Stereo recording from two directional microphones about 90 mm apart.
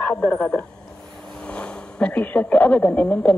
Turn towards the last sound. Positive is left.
turn(degrees=15)  # may be behind; listen again after turning